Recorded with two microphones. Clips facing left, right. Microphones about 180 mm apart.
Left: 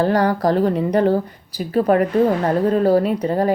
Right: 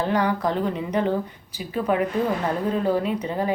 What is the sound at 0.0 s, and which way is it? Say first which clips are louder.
A woman's voice: left 6 dB; 40° left (ahead or behind).